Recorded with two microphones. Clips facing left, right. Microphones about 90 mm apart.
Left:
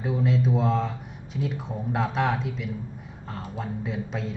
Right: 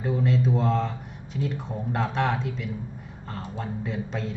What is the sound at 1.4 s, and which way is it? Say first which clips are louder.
Speech: even; centre (ahead or behind).